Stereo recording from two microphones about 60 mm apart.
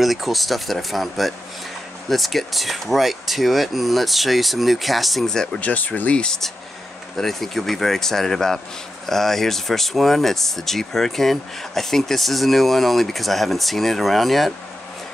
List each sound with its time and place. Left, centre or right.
0.0 s speech: centre
5.6 s speech: left
7.2 s speech: centre